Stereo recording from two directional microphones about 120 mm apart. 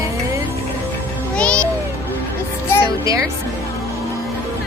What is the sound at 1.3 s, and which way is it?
Music, 10° left (ahead or behind).